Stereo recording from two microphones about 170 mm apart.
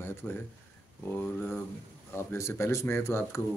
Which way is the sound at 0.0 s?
10° left (ahead or behind).